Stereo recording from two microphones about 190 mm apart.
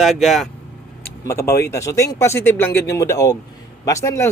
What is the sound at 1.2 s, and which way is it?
A man's voice, 15° left (ahead or behind).